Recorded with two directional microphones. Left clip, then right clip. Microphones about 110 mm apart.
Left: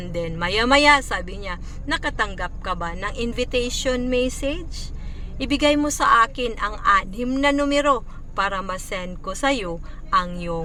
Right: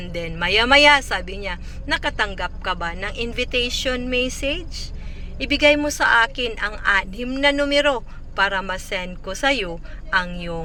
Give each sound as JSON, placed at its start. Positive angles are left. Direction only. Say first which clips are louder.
{"t": 0.0, "sound": "a woman's voice", "louder": "right 1 dB", "side_deg": 25}